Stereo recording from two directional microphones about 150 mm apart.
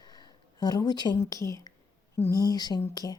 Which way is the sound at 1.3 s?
20° left (ahead or behind).